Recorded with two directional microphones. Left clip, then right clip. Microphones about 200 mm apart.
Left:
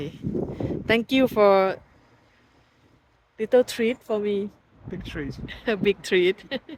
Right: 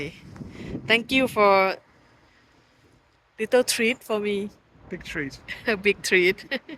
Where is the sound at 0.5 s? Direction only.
50° left (ahead or behind).